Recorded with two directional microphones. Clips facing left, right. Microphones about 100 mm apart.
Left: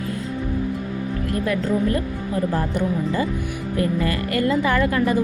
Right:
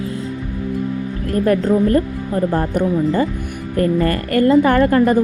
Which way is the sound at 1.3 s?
45° right (ahead or behind).